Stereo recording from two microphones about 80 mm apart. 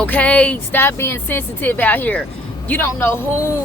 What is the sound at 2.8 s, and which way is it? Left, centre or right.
Speech, left.